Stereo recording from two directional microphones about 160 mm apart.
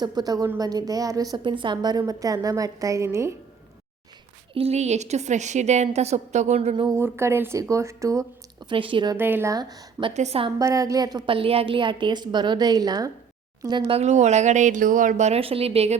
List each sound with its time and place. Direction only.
0.0 s a woman's voice: 25° right (ahead or behind)
4.5 s speech: 40° right (ahead or behind)
6.8 s speech: 15° right (ahead or behind)
8.7 s speech: 30° right (ahead or behind)
9.1 s a woman's voice: 15° right (ahead or behind)
10.2 s speech: 40° right (ahead or behind)
10.6 s a woman's voice: 20° right (ahead or behind); by 16.0 s 40° right (ahead or behind)